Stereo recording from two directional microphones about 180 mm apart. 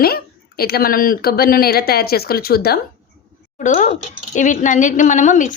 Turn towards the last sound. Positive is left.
turn(degrees=45)  # may be behind; listen again after turning